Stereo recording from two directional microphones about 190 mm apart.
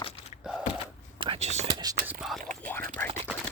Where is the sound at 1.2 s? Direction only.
30° right (ahead or behind).